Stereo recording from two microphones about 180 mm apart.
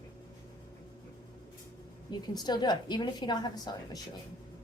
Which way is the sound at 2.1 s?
25° left (ahead or behind).